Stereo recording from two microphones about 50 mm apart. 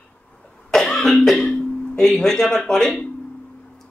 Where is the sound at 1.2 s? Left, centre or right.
Centre.